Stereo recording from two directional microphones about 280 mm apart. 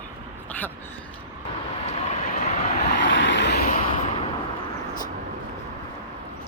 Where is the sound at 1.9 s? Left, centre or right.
Left.